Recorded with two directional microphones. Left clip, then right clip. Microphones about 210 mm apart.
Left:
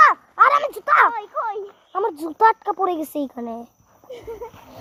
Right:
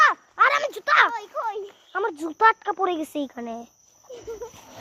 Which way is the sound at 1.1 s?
50° right (ahead or behind).